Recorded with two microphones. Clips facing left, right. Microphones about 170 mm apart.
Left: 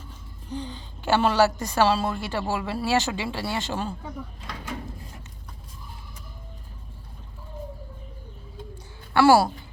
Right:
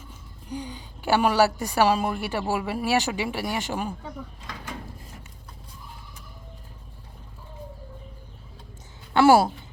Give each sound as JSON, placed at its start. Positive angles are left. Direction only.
{"t": 0.5, "sound": "a woman's voice", "side_deg": -15}
{"t": 9.1, "sound": "speech", "side_deg": -20}